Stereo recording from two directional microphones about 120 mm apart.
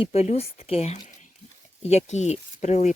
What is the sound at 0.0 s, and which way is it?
Speech, 60° left (ahead or behind).